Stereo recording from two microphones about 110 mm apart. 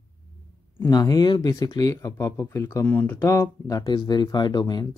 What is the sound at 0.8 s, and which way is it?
Speech, 35° left (ahead or behind).